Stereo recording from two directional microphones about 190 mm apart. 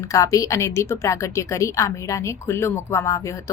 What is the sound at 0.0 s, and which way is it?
A woman's voice, 15° left (ahead or behind).